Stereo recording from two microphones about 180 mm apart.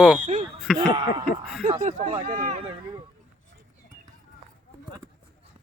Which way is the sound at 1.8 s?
40° right (ahead or behind).